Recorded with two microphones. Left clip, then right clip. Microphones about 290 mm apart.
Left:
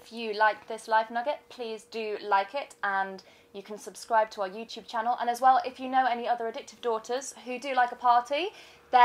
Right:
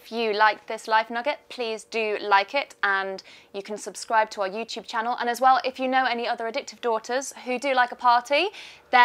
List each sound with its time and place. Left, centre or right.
0.1 s a woman's voice: right